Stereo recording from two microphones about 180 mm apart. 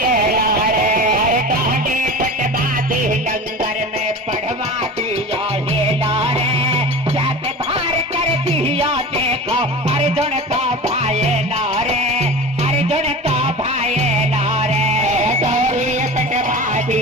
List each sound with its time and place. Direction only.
0.1 s music: 50° right (ahead or behind)
2.9 s music: 50° right (ahead or behind)
6.1 s music: 35° right (ahead or behind)